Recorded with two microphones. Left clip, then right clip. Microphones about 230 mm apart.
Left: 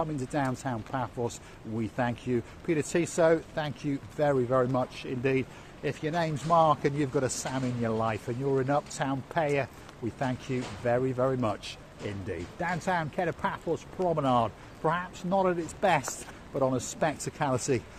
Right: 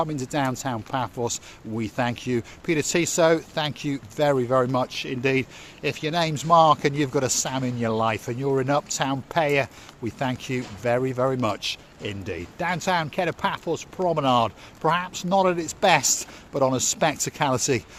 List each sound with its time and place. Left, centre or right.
0.0 s speech: right